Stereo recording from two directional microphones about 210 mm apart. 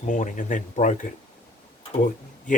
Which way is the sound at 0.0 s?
35° left (ahead or behind).